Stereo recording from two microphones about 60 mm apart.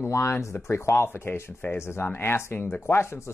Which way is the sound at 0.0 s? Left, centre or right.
Left.